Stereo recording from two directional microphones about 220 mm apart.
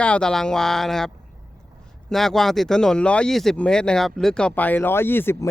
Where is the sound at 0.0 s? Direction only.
5° left (ahead or behind).